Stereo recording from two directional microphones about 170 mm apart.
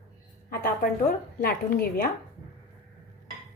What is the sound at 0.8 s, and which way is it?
Speech, 55° left (ahead or behind).